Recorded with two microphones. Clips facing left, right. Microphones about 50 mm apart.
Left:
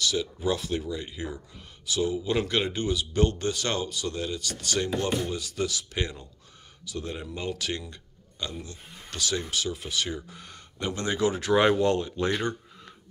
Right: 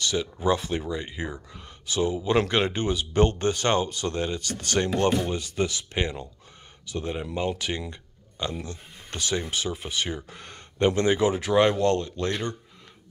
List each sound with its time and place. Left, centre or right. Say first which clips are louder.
0.1 s speech: right 3 dB; right
5.2 s speech: right 3 dB; right
7.9 s a sound: right 3 dB; right
8.6 s speech: right 4 dB; right
10.3 s speech: right 3 dB; right
11.1 s speech: left 1 dB; right
11.3 s speech: right 1 dB; centre
11.6 s speech: right 1 dB; centre